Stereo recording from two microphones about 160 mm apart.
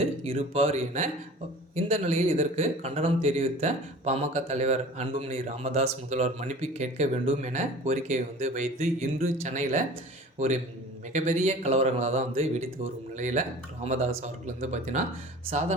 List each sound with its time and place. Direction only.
0.0 s a man's voice: 40° right (ahead or behind)